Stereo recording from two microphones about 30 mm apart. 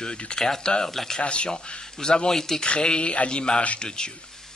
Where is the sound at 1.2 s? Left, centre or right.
Left.